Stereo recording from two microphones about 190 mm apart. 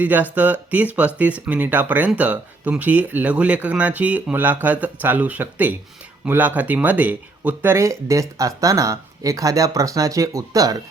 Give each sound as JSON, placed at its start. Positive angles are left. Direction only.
{"t": 0.0, "sound": "speech", "side_deg": -10}